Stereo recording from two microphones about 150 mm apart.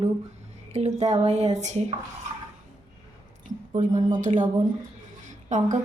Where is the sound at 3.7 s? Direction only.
55° right (ahead or behind).